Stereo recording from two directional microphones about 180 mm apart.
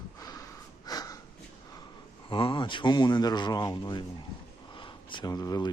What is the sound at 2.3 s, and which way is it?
Speech, 30° left (ahead or behind).